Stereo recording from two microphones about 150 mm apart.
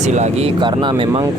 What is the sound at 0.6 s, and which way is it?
Speech, 30° right (ahead or behind).